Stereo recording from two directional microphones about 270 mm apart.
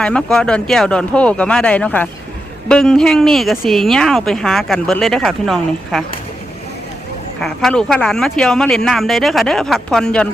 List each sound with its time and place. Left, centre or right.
0.0 s speech: centre
7.4 s speech: centre